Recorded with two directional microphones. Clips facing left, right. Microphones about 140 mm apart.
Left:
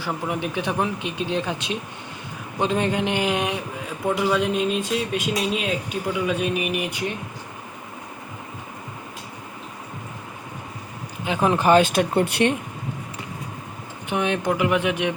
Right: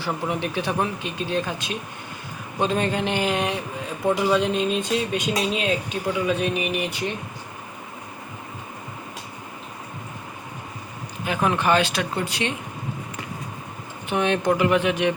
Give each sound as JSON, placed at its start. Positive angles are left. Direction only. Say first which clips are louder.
{"t": 0.5, "sound": "speech", "louder": "even", "side_deg": 15}
{"t": 11.4, "sound": "speech", "louder": "left 4 dB", "side_deg": 35}
{"t": 14.1, "sound": "speech", "louder": "right 2 dB", "side_deg": 10}